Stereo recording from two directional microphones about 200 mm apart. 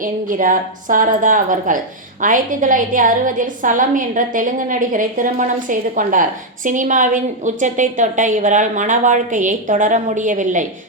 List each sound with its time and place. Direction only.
0.0 s a woman's voice: 40° right (ahead or behind)